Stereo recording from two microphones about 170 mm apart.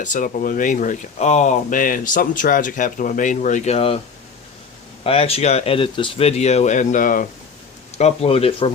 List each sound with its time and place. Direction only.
0.0 s speech: 50° left (ahead or behind)
5.0 s speech: 35° left (ahead or behind); by 7.3 s 50° left (ahead or behind)
7.9 s speech: 35° left (ahead or behind)